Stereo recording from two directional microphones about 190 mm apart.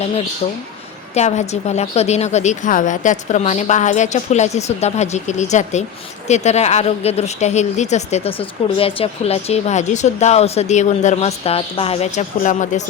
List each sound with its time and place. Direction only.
1.1 s speech: 35° left (ahead or behind)